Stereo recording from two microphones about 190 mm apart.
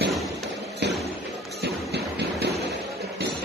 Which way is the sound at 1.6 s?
60° right (ahead or behind).